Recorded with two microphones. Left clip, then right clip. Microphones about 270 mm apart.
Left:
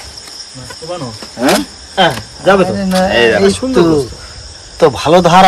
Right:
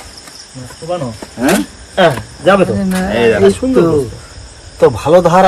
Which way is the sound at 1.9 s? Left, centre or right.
Centre.